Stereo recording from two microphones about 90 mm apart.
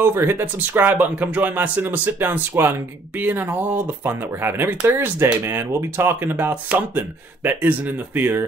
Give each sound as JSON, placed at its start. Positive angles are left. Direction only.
{"t": 0.0, "sound": "speech", "side_deg": -25}